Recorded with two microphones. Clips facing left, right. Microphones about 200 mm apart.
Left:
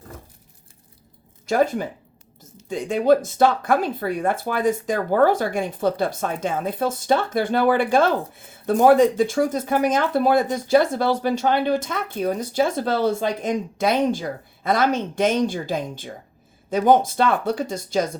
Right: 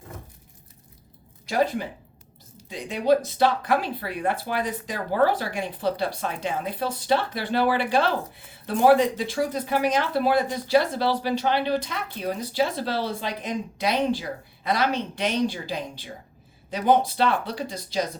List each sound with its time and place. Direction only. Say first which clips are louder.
1.5 s speech: left 4 dB; 45° left (ahead or behind)